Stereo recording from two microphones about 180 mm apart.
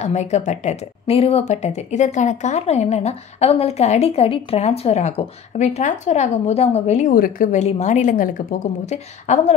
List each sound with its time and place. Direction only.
0.0 s speech: 40° left (ahead or behind)